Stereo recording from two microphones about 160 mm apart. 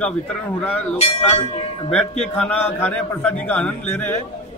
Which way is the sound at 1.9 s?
5° left (ahead or behind).